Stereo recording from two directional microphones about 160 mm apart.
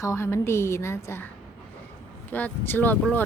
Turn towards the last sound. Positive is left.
turn(degrees=10)  # may be behind; listen again after turning